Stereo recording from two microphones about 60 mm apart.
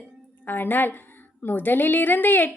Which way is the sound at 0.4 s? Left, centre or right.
Left.